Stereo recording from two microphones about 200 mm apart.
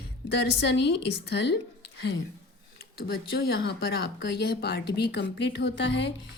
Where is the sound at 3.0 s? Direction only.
50° left (ahead or behind).